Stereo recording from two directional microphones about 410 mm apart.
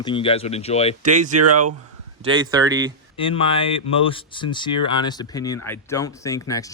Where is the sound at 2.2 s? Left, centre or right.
Centre.